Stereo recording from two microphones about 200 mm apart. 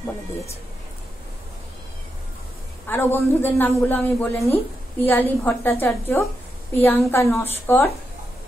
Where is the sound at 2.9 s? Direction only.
10° left (ahead or behind).